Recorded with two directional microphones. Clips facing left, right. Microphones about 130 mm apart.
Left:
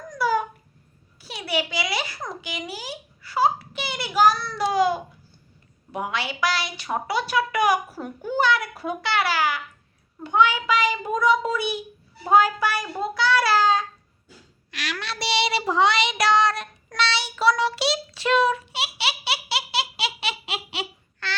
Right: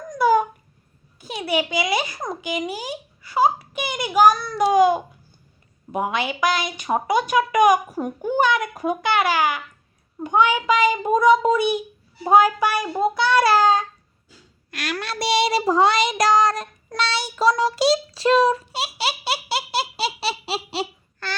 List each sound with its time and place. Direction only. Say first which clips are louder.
0.1 s a sound: right 6 dB; 20° right (ahead or behind)
1.5 s a woman's voice: right 4 dB; 20° right (ahead or behind)
10.7 s speech: right 4 dB; 50° right (ahead or behind)
11.0 s a woman's voice: right 6 dB; 20° right (ahead or behind)
13.1 s speech: right 1 dB; 50° right (ahead or behind)
14.7 s child singing: right 4 dB; 50° right (ahead or behind)